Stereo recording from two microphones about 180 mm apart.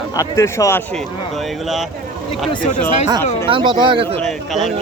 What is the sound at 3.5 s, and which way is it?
Speech, 25° right (ahead or behind).